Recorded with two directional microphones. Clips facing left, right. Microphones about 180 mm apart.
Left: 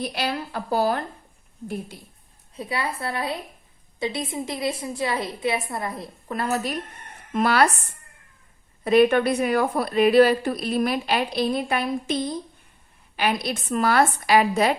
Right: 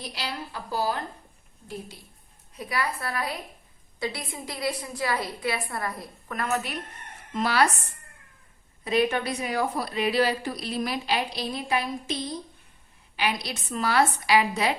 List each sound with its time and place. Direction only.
0.0 s a woman's voice: 60° left (ahead or behind)
2.6 s a woman's voice: 25° left (ahead or behind)
7.3 s a woman's voice: 55° left (ahead or behind)
8.8 s a woman's voice: 55° left (ahead or behind)
13.1 s a woman's voice: 50° left (ahead or behind)